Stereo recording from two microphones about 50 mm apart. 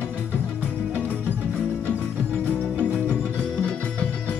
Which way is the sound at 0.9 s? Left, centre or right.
Right.